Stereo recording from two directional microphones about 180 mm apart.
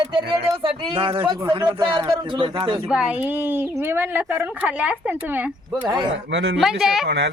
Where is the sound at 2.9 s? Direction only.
5° right (ahead or behind).